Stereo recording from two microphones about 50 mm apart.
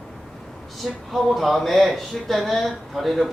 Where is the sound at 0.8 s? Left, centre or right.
Centre.